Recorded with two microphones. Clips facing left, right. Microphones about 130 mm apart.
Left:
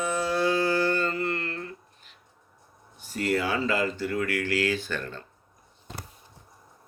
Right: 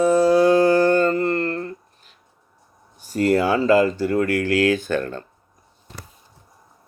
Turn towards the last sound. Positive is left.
turn(degrees=-50)  # may be behind; listen again after turning